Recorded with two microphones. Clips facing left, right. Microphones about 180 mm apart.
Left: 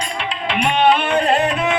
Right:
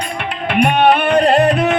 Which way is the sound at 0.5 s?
60° right (ahead or behind).